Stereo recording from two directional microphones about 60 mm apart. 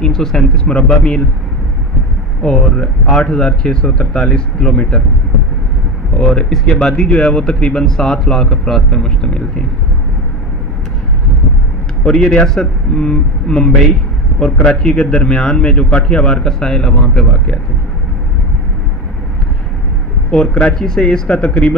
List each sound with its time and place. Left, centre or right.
0.0 s speech: centre
2.4 s speech: centre
6.1 s speech: centre
12.0 s speech: centre
20.2 s speech: centre